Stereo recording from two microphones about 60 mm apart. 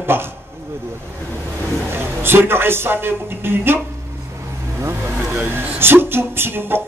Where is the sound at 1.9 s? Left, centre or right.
Right.